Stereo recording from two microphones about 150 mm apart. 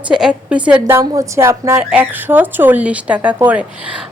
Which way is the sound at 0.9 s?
20° right (ahead or behind).